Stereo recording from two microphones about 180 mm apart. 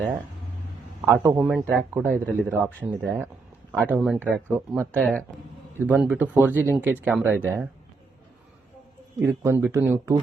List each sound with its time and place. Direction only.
1.0 s a man's voice: 20° right (ahead or behind)
1.4 s speech: centre (ahead or behind)
5.8 s speech: 10° right (ahead or behind)
9.2 s speech: 15° right (ahead or behind)